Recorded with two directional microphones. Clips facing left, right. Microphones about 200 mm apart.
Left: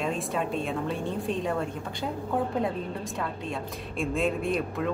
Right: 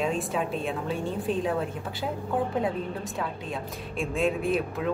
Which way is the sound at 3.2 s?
Centre (ahead or behind).